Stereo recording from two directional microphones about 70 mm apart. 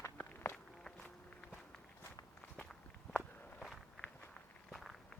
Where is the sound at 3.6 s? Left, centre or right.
Centre.